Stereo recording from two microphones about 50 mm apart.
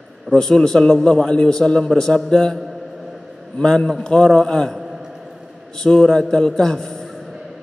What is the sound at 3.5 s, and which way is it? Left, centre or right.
A man's voice, centre.